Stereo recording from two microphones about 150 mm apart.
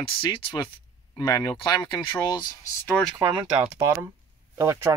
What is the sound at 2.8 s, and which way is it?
Speech, 5° left (ahead or behind).